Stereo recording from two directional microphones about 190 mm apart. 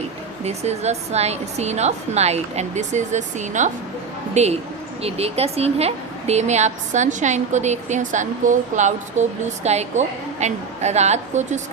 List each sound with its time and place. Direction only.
0.4 s a woman's voice: 35° right (ahead or behind)